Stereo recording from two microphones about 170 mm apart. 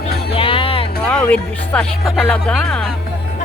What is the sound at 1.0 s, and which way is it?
Speech, 5° left (ahead or behind).